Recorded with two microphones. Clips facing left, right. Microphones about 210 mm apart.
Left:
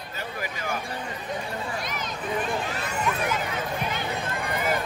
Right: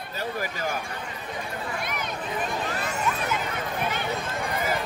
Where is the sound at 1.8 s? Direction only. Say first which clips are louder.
Right 1 dB; 60° right (ahead or behind).